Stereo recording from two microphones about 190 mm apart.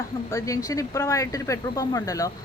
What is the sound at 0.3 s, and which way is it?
A man's voice, 15° left (ahead or behind).